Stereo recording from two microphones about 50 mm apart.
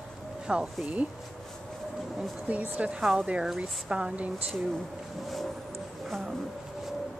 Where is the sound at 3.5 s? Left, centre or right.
Centre.